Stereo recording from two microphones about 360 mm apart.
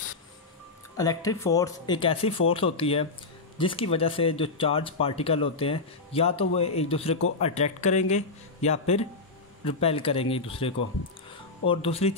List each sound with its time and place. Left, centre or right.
0.9 s speech: centre